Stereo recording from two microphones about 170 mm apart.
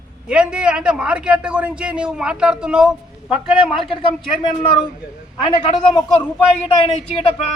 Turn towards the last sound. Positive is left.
turn(degrees=35)  # may be behind; listen again after turning